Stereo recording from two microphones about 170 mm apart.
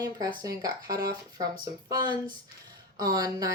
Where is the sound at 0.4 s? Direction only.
20° right (ahead or behind).